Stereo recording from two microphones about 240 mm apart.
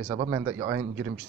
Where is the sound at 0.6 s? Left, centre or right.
Right.